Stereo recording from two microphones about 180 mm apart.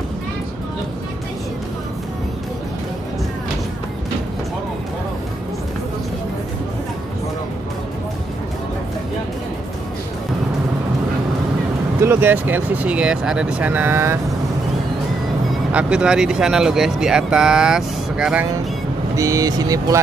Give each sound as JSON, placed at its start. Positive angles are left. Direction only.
{"t": 12.0, "sound": "speech", "side_deg": -10}
{"t": 15.7, "sound": "speech", "side_deg": -5}
{"t": 19.1, "sound": "speech", "side_deg": -20}